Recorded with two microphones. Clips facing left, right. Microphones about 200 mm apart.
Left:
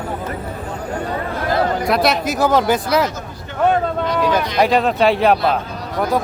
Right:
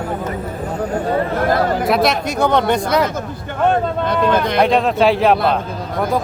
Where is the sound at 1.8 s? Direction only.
Centre (ahead or behind).